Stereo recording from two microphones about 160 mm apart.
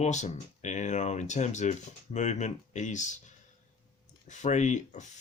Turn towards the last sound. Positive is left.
turn(degrees=45)  # may be behind; listen again after turning